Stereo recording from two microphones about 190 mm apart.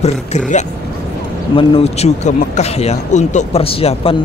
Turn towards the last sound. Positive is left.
turn(degrees=30)  # may be behind; listen again after turning